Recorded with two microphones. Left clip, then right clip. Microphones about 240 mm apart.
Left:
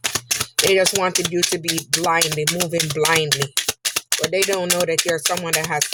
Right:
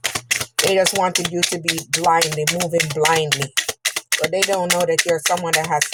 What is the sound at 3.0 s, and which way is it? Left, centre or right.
Speech, left.